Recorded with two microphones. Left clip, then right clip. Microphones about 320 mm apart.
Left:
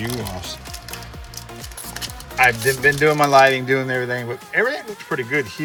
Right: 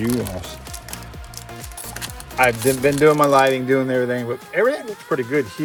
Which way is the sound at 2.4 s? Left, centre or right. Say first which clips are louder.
Left 1 dB; centre.